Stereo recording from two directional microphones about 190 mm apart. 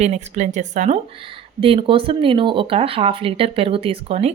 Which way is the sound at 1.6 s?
30° right (ahead or behind).